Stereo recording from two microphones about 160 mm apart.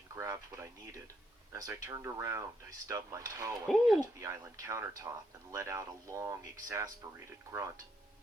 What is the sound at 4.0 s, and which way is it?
Speech, 20° right (ahead or behind).